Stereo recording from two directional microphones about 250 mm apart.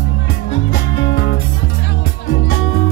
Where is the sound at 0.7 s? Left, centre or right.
Left.